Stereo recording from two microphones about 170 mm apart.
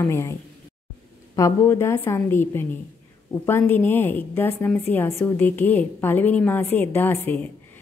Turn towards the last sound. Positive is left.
turn(degrees=10)  # may be behind; listen again after turning